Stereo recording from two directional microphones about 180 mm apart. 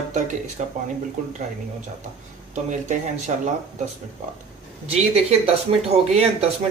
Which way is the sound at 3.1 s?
40° right (ahead or behind).